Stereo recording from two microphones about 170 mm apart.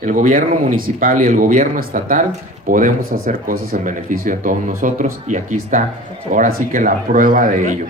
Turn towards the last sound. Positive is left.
turn(degrees=-50)  # may be behind; listen again after turning